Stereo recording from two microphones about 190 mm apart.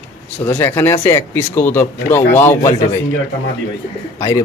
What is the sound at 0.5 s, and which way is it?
Speech, 15° left (ahead or behind).